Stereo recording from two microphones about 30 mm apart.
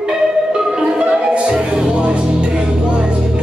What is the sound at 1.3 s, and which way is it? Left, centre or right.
Music, right.